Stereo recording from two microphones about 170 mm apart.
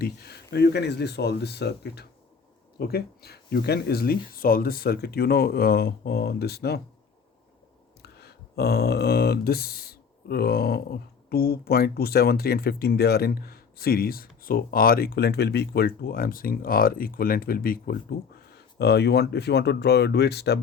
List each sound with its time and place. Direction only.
0.0 s speech: 70° left (ahead or behind)
8.2 s speech: 70° left (ahead or behind)
18.8 s speech: 75° left (ahead or behind)